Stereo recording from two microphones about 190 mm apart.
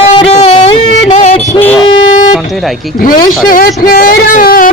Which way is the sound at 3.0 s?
45° left (ahead or behind).